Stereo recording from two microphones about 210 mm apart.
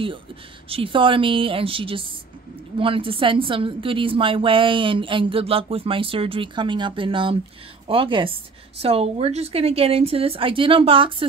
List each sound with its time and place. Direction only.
0.7 s a woman's voice: 25° right (ahead or behind)